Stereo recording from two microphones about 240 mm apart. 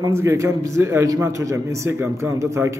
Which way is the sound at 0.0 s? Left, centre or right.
Centre.